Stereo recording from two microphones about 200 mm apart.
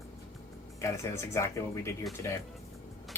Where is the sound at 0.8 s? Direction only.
15° left (ahead or behind).